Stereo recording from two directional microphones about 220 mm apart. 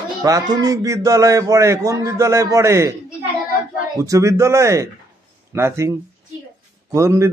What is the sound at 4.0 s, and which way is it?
Speech, 15° right (ahead or behind).